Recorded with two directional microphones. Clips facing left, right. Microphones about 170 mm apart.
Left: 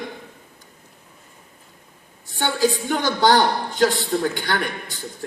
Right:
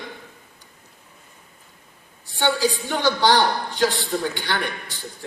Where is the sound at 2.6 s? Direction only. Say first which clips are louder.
Left 2 dB; 50° left (ahead or behind).